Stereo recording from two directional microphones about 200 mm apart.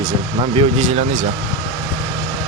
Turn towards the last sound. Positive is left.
turn(degrees=-35)  # may be behind; listen again after turning